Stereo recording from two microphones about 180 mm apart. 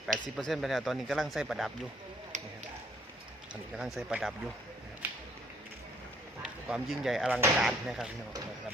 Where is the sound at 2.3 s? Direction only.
40° right (ahead or behind).